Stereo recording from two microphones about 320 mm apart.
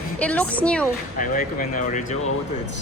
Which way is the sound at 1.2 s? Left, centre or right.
Left.